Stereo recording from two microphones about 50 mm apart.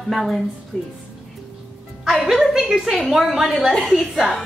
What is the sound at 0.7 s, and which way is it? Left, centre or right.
Speech, centre.